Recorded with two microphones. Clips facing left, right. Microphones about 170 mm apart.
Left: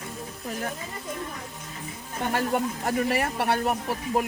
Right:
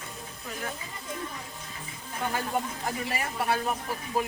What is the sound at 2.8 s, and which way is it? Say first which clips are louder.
Speech: left 7 dB; 65° left (ahead or behind).